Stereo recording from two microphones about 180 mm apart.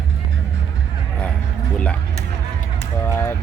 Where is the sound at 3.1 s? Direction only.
15° left (ahead or behind).